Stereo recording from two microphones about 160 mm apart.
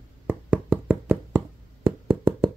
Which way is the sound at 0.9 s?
15° right (ahead or behind).